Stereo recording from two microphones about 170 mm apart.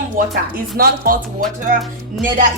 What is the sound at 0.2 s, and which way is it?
Speech, 50° right (ahead or behind).